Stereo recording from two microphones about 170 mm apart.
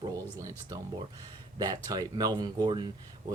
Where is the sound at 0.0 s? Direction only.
20° right (ahead or behind).